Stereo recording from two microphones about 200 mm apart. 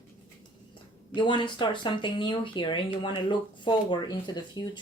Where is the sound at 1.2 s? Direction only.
25° left (ahead or behind).